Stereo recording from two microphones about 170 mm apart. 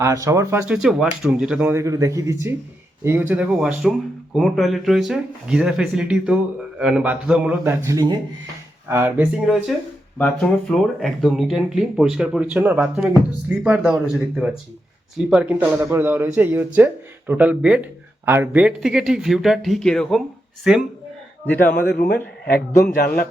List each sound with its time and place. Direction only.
0.0 s speech: 15° right (ahead or behind)
0.6 s speech: 5° right (ahead or behind)
21.9 s a man's voice: 60° left (ahead or behind)